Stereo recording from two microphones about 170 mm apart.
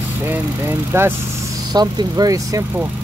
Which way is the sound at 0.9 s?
15° right (ahead or behind).